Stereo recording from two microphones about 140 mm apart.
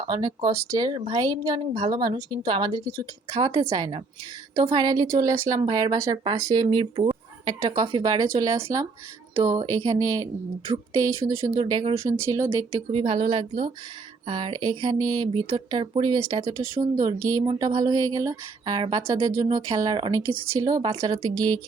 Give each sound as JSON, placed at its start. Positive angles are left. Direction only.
{"t": 0.1, "sound": "speech", "side_deg": -30}
{"t": 9.6, "sound": "speech", "side_deg": -25}
{"t": 11.3, "sound": "speech", "side_deg": -25}
{"t": 11.6, "sound": "speech", "side_deg": -35}
{"t": 12.7, "sound": "speech", "side_deg": -45}